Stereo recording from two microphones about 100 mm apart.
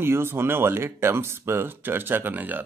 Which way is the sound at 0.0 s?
25° right (ahead or behind).